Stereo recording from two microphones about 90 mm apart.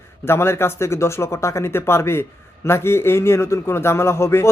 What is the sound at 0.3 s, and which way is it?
A man's voice, 30° left (ahead or behind).